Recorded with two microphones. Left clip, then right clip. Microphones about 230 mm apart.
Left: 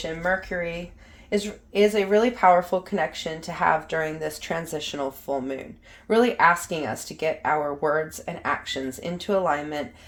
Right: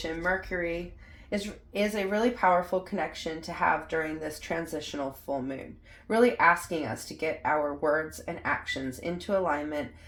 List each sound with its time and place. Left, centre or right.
0.5 s speech: left